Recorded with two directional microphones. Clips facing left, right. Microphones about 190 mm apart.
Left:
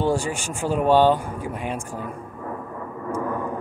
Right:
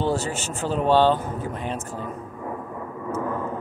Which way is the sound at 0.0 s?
10° left (ahead or behind).